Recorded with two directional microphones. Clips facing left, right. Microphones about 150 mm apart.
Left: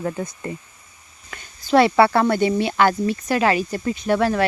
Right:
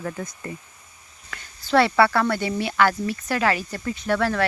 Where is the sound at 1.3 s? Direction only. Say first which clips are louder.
Left 4 dB; 15° left (ahead or behind).